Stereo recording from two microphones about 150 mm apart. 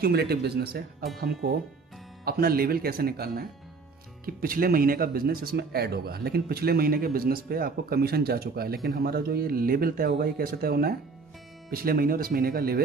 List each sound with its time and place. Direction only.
0.0 s speech: 90° right
4.3 s speech: 75° right (ahead or behind); by 11.0 s 90° right
11.7 s speech: 75° right (ahead or behind)